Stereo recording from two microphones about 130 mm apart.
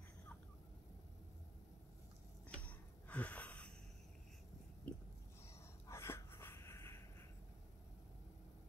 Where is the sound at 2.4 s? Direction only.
10° left (ahead or behind).